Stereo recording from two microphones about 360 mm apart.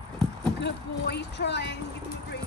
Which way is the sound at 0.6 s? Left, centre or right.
Left.